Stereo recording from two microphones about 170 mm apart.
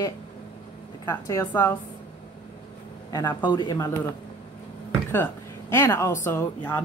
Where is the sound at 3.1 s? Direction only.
20° left (ahead or behind).